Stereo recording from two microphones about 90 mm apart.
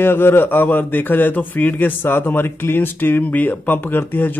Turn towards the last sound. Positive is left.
turn(degrees=20)  # may be behind; listen again after turning